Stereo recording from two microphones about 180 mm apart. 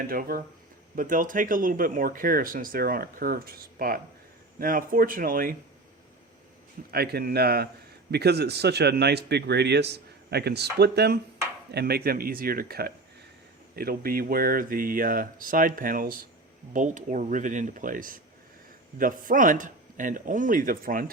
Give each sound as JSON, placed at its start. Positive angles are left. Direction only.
{"t": 0.1, "sound": "speech", "side_deg": -55}
{"t": 6.9, "sound": "speech", "side_deg": -60}